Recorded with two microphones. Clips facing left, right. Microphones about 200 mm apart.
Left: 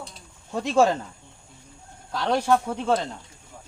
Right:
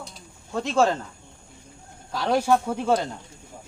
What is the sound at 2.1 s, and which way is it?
Speech, 5° right (ahead or behind).